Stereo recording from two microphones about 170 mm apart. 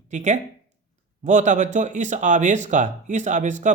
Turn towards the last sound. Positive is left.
turn(degrees=-45)  # may be behind; listen again after turning